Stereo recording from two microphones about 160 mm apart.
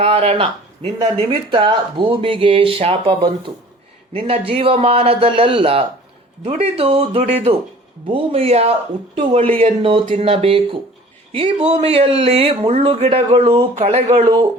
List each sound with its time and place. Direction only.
0.0 s speech: 35° right (ahead or behind)